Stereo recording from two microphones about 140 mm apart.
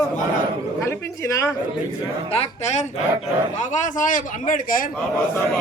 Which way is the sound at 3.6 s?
65° left (ahead or behind).